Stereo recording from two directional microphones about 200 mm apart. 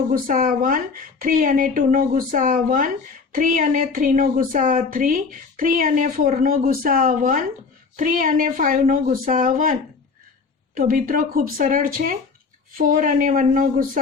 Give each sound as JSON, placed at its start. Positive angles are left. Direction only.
{"t": 0.1, "sound": "a woman's voice", "side_deg": -45}
{"t": 10.8, "sound": "a woman's voice", "side_deg": -45}